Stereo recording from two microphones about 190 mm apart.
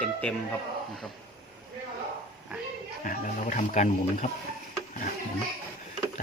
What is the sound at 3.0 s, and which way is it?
Speech, 45° left (ahead or behind).